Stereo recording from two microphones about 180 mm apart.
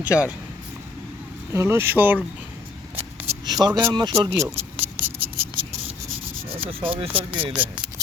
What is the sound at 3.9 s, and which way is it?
Speech, 25° right (ahead or behind).